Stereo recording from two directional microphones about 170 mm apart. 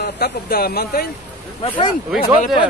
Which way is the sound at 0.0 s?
65° left (ahead or behind).